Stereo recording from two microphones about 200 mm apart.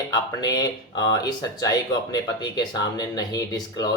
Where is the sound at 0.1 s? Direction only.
20° left (ahead or behind).